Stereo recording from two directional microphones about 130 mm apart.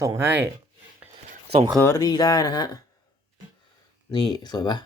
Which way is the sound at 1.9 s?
30° left (ahead or behind).